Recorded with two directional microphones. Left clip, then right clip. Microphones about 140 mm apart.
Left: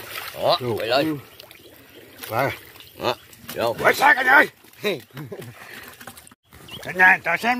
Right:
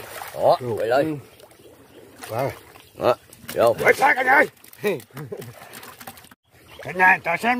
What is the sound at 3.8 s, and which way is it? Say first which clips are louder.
Speech: left 1 dB; 5° right (ahead or behind).